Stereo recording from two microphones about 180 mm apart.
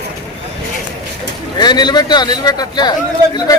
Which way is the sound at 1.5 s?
25° left (ahead or behind).